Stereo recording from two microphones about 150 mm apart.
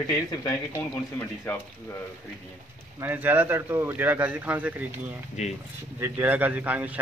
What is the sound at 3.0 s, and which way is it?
A man's voice, 15° right (ahead or behind).